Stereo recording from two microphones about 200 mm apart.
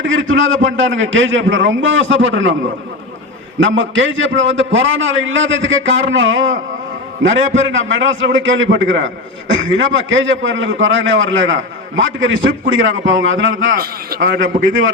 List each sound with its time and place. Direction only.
0.1 s a man's voice: 75° right (ahead or behind)
3.6 s a man's voice: 70° right (ahead or behind)
13.7 s a man's voice: 50° right (ahead or behind); by 14.9 s 70° right (ahead or behind)